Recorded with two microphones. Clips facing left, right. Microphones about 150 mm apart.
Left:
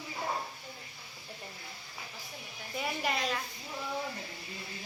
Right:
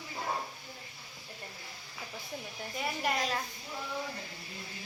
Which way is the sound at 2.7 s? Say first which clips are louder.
Even; centre (ahead or behind).